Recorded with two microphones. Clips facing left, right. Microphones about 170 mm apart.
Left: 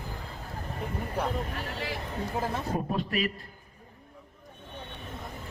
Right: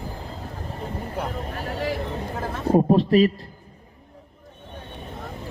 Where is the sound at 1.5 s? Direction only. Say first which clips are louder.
Right 7 dB; 40° right (ahead or behind).